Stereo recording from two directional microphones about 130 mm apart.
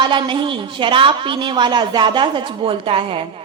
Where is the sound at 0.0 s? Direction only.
40° right (ahead or behind).